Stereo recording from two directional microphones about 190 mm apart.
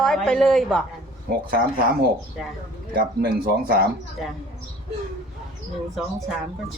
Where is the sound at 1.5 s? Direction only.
50° right (ahead or behind).